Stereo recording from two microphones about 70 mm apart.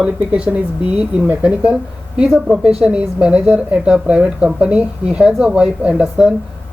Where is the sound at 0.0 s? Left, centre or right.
Centre.